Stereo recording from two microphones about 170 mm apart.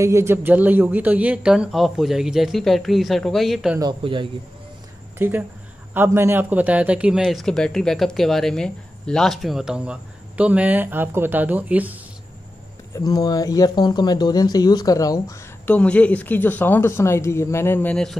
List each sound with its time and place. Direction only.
0.0 s speech: 15° right (ahead or behind); by 3.7 s centre (ahead or behind)
3.8 s speech: 30° right (ahead or behind)
5.2 s a man's voice: 15° right (ahead or behind)
12.9 s speech: 20° left (ahead or behind)
15.7 s speech: 10° left (ahead or behind)